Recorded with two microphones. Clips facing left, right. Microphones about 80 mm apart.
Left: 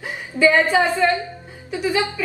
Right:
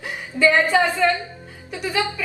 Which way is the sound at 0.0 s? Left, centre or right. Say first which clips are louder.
Left 1 dB; centre.